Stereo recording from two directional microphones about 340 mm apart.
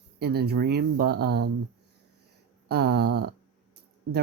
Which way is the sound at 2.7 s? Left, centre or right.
Right.